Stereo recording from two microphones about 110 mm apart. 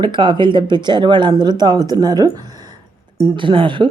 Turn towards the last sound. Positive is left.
turn(degrees=-50)  # may be behind; listen again after turning